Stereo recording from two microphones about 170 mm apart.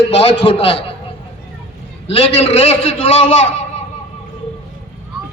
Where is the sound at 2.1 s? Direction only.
35° left (ahead or behind).